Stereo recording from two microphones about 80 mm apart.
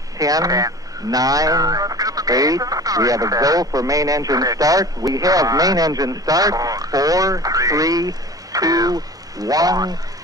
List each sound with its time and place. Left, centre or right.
0.2 s speech: right